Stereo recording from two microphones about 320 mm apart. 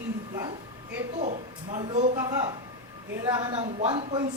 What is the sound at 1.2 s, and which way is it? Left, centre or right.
Speech, right.